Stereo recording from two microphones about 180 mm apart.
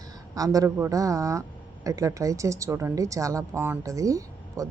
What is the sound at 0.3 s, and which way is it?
A woman's voice, 20° right (ahead or behind).